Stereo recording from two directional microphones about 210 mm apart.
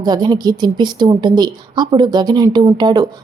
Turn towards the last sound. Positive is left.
turn(degrees=-20)  # may be behind; listen again after turning